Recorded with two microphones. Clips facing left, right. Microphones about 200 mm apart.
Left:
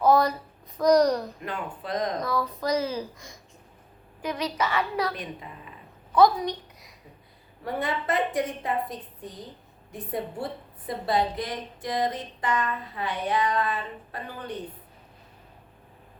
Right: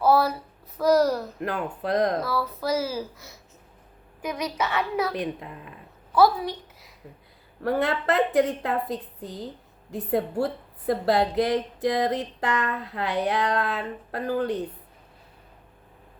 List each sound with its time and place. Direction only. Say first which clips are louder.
0.0 s a sound: even; 5° right (ahead or behind)
1.4 s speech: right 5 dB; 65° right (ahead or behind)
2.2 s a woman's voice: even; 5° right (ahead or behind)
5.1 s speech: right 7 dB; 65° right (ahead or behind)
6.1 s a woman's voice: even; 5° right (ahead or behind)
7.6 s speech: right 5 dB; 70° right (ahead or behind)
10.4 s speech: right 8 dB; 75° right (ahead or behind)